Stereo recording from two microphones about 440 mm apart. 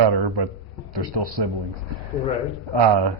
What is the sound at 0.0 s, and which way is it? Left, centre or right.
A man's voice, right.